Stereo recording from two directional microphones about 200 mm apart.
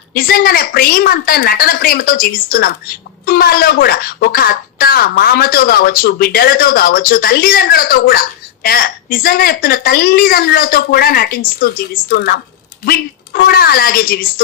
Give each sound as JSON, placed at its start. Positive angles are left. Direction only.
{"t": 0.1, "sound": "a woman's voice", "side_deg": 50}